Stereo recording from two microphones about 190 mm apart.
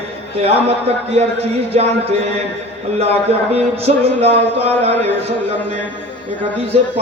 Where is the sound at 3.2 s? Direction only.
35° right (ahead or behind).